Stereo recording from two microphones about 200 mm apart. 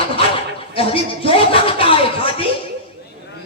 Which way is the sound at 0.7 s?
30° left (ahead or behind).